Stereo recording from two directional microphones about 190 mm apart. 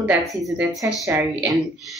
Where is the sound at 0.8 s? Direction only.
15° right (ahead or behind).